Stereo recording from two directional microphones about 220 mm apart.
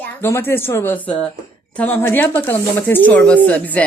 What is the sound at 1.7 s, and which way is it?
Speech, 10° left (ahead or behind).